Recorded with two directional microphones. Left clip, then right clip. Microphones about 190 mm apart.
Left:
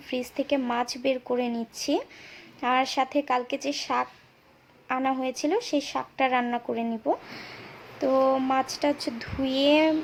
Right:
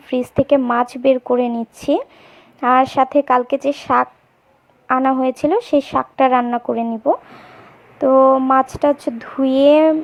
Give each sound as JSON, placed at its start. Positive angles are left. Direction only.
{"t": 0.1, "sound": "speech", "side_deg": -30}